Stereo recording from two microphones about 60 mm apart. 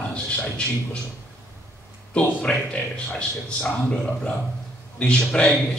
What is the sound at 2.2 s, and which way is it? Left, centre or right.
A man's voice, centre.